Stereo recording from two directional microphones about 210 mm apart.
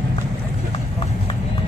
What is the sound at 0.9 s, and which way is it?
Run, 25° left (ahead or behind).